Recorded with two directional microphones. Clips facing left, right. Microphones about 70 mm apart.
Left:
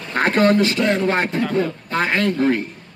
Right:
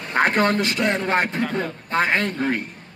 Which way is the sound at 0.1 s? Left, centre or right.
Centre.